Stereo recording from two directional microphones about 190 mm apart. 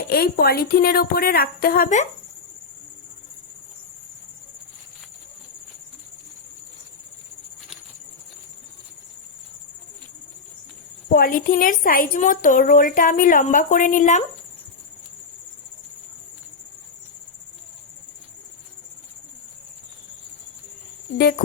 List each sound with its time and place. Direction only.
0.1 s a woman's voice: 55° left (ahead or behind)
11.1 s a woman's voice: 50° left (ahead or behind)
21.2 s speech: 60° left (ahead or behind)